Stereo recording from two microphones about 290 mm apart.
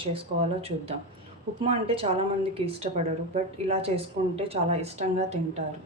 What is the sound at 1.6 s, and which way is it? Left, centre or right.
A woman's voice, centre.